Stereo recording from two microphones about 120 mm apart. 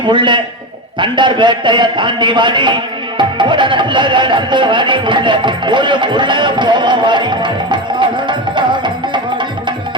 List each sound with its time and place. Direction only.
0.0 s a man's voice: 40° right (ahead or behind)
3.2 s music: 40° right (ahead or behind)